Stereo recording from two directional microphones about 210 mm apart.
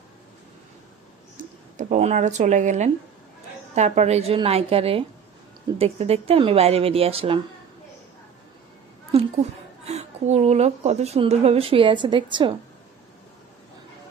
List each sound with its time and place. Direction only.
1.4 s a woman's voice: 35° right (ahead or behind)
9.1 s a woman's voice: 30° right (ahead or behind)